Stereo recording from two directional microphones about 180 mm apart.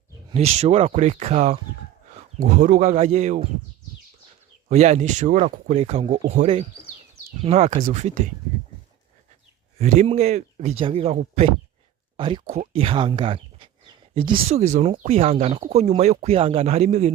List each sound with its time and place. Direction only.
0.3 s speech: 35° right (ahead or behind)
4.7 s speech: 40° right (ahead or behind)
9.7 s speech: 40° right (ahead or behind)